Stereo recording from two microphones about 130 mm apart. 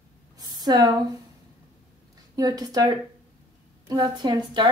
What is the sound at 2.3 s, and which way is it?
A woman's voice, 30° right (ahead or behind).